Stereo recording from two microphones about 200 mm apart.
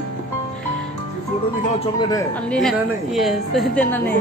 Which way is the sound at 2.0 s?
20° left (ahead or behind).